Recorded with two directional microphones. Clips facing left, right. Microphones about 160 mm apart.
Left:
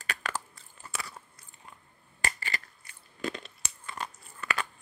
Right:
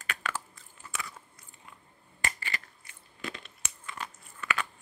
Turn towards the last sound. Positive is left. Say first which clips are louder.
# even
turn(degrees=35)  # may be behind; listen again after turning